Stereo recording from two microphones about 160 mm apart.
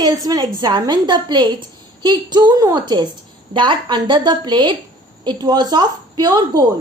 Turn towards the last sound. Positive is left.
turn(degrees=-25)  # may be behind; listen again after turning